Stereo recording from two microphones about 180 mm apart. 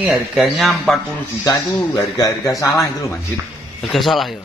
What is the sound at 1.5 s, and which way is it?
Speech, 20° left (ahead or behind).